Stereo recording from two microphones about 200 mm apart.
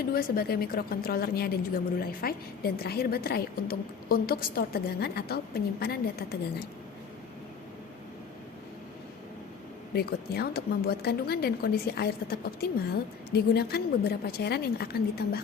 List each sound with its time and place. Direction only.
0.1 s a woman's voice: 50° left (ahead or behind)
9.9 s a woman's voice: 50° left (ahead or behind)